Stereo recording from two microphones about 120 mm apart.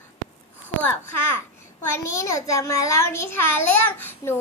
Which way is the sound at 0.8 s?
15° left (ahead or behind).